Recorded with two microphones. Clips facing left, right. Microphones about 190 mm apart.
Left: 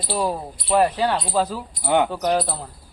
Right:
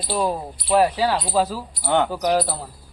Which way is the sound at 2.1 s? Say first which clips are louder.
Right 1 dB; centre (ahead or behind).